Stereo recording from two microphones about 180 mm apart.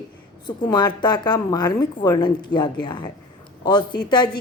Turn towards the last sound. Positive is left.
turn(degrees=25)  # may be behind; listen again after turning